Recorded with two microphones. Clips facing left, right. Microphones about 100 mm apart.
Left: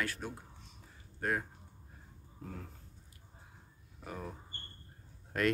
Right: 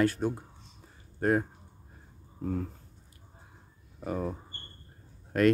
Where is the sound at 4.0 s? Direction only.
50° right (ahead or behind).